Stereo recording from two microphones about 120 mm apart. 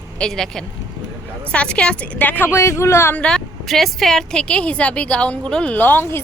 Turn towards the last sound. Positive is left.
turn(degrees=15)  # may be behind; listen again after turning